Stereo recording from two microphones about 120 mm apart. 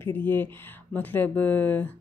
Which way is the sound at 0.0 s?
15° left (ahead or behind).